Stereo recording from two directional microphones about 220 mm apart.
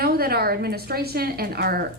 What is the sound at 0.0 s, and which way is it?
A woman's voice, 45° right (ahead or behind).